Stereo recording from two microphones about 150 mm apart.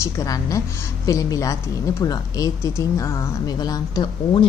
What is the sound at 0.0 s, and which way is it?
Speech, 20° left (ahead or behind).